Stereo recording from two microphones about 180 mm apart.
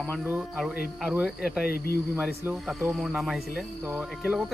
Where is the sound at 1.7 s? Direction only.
60° left (ahead or behind).